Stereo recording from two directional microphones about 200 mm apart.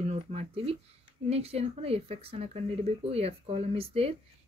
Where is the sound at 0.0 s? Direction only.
30° right (ahead or behind).